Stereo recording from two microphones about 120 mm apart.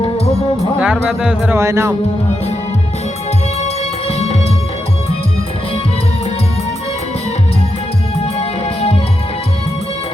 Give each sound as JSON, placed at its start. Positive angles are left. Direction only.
{"t": 0.8, "sound": "speech", "side_deg": -10}
{"t": 1.5, "sound": "speech", "side_deg": -25}
{"t": 8.4, "sound": "music", "side_deg": 60}